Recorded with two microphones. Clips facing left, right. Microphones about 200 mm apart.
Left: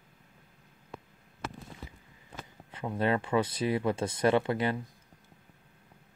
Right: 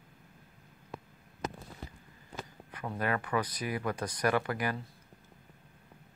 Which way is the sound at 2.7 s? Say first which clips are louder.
Left 4 dB; 25° left (ahead or behind).